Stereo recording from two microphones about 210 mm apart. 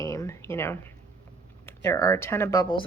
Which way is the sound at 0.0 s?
15° left (ahead or behind).